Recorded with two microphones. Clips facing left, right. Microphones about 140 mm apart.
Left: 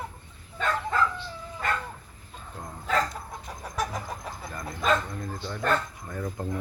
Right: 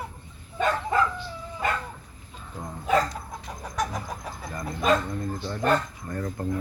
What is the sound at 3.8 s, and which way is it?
Chicken, centre (ahead or behind).